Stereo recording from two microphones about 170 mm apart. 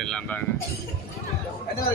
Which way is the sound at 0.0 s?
5° left (ahead or behind).